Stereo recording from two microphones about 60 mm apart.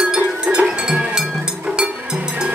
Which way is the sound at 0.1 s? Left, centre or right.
Centre.